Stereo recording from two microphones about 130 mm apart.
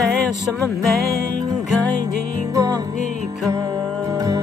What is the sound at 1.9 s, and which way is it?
Music, 25° right (ahead or behind).